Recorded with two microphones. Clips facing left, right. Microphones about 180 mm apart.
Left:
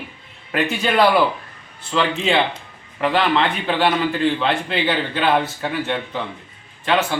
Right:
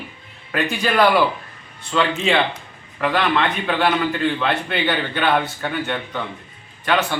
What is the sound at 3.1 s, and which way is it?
Speech, 30° left (ahead or behind).